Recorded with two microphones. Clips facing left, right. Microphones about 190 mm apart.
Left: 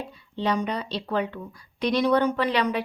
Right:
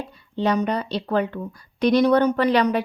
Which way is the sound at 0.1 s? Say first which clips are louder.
Right 5 dB; 50° right (ahead or behind).